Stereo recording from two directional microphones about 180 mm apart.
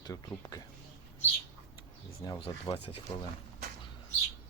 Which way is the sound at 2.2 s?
20° left (ahead or behind).